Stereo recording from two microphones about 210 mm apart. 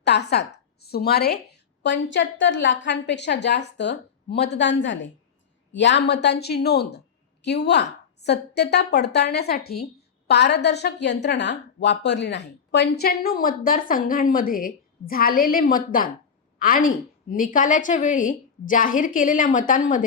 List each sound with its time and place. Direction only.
0.0 s a woman's voice: 55° left (ahead or behind)